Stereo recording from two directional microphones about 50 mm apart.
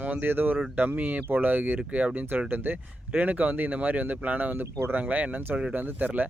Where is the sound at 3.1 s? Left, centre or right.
Right.